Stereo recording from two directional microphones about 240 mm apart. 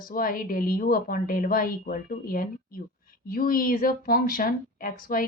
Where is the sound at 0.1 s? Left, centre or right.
Left.